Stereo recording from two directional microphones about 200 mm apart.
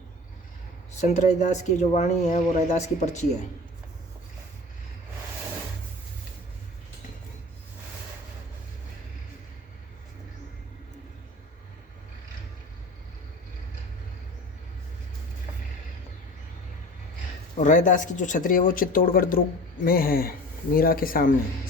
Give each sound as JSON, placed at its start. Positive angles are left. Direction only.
{"t": 1.0, "sound": "speech", "side_deg": 35}
{"t": 17.6, "sound": "speech", "side_deg": 40}